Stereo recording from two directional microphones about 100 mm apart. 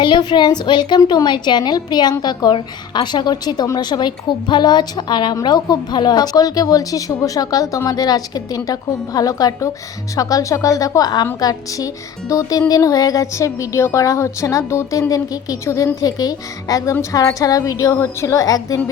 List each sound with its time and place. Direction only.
0.0 s a woman's voice: 50° left (ahead or behind)